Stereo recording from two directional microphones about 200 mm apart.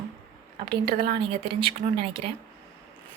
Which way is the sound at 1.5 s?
25° right (ahead or behind).